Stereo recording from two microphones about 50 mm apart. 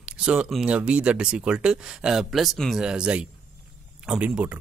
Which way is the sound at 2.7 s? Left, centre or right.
Centre.